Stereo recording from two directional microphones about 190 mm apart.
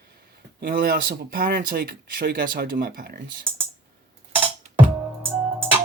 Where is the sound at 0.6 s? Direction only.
50° right (ahead or behind).